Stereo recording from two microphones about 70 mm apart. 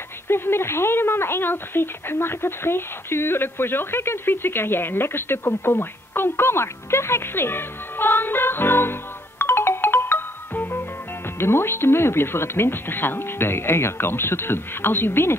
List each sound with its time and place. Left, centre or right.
0.3 s a woman's voice: left
9.4 s music: left
11.3 s a woman's voice: left